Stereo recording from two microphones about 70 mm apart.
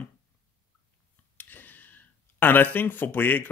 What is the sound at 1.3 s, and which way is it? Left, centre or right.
Speech, left.